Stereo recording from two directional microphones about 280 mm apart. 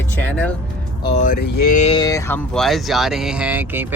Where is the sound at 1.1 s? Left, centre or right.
Left.